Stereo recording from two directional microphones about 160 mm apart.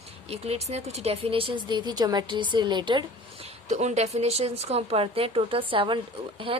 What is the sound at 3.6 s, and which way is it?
Speech, 45° right (ahead or behind).